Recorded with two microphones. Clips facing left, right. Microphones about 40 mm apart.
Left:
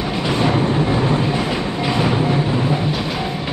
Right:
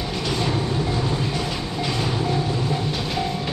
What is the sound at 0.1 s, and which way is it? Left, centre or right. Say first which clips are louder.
Train: left 6 dB; left.